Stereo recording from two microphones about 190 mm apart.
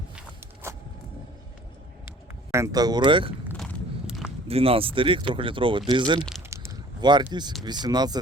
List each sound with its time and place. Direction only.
0.2 s a sound: 15° right (ahead or behind)
2.5 s speech: 15° right (ahead or behind)
3.6 s biting: centre (ahead or behind)
4.4 s speech: 30° right (ahead or behind)
6.5 s a sound: 15° right (ahead or behind)
7.6 s speech: 20° right (ahead or behind)